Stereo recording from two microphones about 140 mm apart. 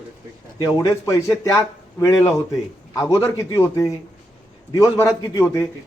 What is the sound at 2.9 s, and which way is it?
Speech, 20° left (ahead or behind).